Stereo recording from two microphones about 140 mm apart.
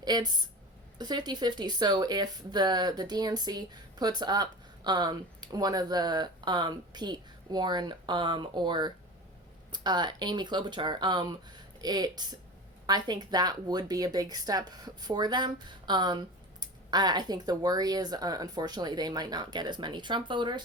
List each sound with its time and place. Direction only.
0.0 s speech: 30° right (ahead or behind)